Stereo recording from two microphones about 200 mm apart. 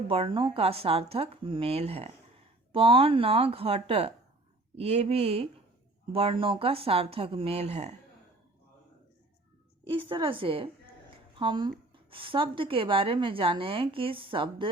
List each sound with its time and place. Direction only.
0.1 s a woman's voice: 25° right (ahead or behind)
9.9 s a woman's voice: 25° right (ahead or behind)